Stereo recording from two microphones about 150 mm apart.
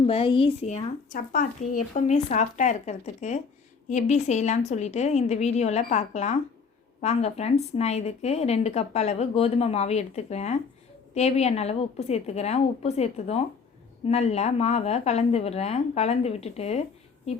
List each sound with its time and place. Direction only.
0.0 s a woman's voice: 35° left (ahead or behind)
1.1 s a woman's voice: 65° left (ahead or behind); by 16.8 s 45° left (ahead or behind)